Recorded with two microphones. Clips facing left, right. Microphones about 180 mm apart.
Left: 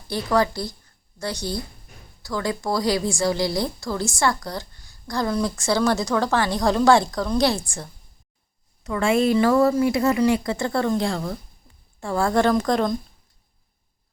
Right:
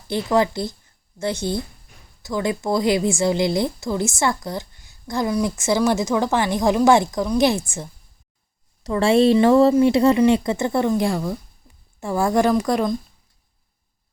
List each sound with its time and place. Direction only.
0.1 s a woman's voice: 20° right (ahead or behind)
8.8 s a woman's voice: 35° right (ahead or behind); by 13.0 s 5° right (ahead or behind)